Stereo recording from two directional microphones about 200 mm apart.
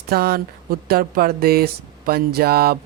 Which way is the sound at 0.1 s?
50° right (ahead or behind).